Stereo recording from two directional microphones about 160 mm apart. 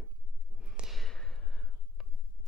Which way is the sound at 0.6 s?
Centre (ahead or behind).